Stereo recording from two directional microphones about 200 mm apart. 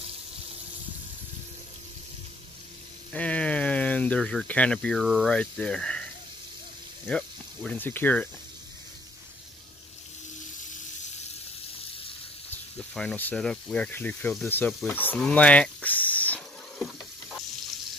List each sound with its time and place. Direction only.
3.1 s speech: 5° left (ahead or behind)
7.1 s speech: 5° left (ahead or behind)
12.7 s speech: 5° left (ahead or behind)
14.9 s a sound: 10° left (ahead or behind)